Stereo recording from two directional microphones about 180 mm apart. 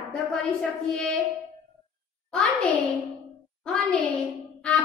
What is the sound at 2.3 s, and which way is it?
A child's voice, 5° left (ahead or behind).